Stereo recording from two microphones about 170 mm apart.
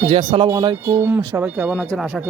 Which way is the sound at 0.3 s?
30° right (ahead or behind).